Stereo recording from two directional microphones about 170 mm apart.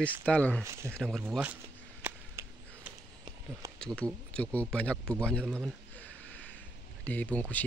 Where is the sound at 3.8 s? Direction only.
5° left (ahead or behind).